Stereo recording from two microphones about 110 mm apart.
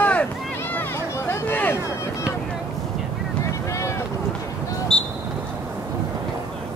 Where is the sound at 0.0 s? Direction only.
15° left (ahead or behind).